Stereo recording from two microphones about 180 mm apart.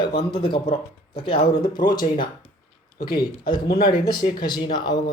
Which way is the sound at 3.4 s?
25° left (ahead or behind).